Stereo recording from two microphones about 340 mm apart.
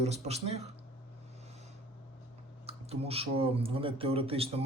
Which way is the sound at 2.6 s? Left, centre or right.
Centre.